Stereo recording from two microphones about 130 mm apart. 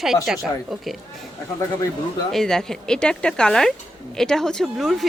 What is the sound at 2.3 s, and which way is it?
Speech, 5° left (ahead or behind).